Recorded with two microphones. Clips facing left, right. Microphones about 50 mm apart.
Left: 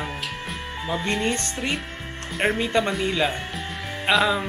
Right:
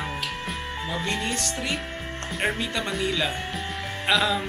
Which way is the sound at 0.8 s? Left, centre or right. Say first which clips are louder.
Left 5 dB; centre.